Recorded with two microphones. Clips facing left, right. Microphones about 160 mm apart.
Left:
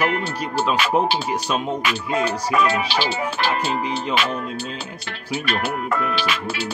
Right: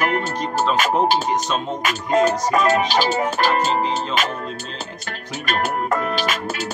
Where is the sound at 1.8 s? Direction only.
45° right (ahead or behind).